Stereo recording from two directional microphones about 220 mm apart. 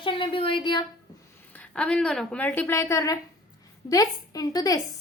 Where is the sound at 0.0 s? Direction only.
25° left (ahead or behind).